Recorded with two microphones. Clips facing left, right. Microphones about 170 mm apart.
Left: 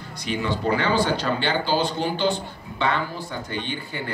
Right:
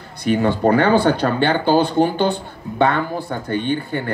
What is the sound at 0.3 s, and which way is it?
Speech, 50° right (ahead or behind).